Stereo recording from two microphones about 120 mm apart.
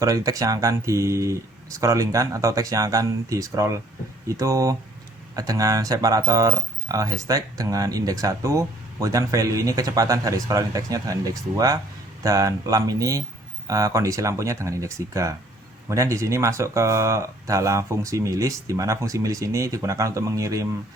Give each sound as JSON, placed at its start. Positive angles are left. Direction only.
{"t": 0.0, "sound": "speech", "side_deg": -30}